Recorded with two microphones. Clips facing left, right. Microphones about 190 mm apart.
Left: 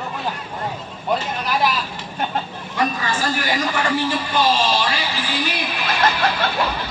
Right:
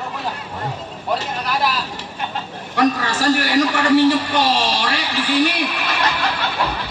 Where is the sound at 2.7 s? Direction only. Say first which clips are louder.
Right 4 dB; 75° right (ahead or behind).